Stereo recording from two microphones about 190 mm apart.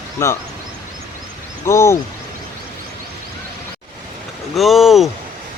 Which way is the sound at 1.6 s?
15° left (ahead or behind).